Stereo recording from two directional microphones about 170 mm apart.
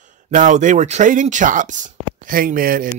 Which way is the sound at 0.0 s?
50° right (ahead or behind).